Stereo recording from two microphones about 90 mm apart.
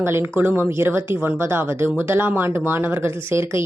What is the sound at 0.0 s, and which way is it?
A woman's voice, 25° right (ahead or behind).